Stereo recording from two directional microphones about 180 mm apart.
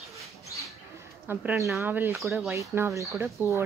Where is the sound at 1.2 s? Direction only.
10° right (ahead or behind).